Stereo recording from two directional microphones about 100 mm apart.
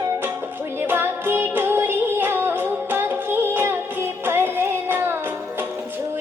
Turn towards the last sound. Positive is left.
turn(degrees=-20)  # may be behind; listen again after turning